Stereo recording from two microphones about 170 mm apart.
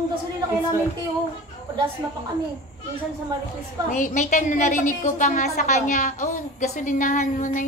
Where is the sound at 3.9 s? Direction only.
45° left (ahead or behind).